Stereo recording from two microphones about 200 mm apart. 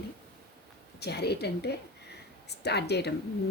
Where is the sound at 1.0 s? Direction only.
55° left (ahead or behind).